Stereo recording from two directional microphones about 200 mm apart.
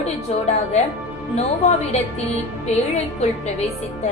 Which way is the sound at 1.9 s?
35° left (ahead or behind).